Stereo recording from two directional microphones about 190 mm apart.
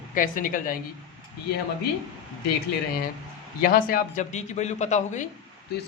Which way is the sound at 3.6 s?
50° left (ahead or behind).